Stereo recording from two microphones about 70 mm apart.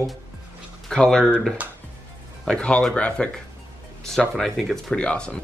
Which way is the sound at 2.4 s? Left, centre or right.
Centre.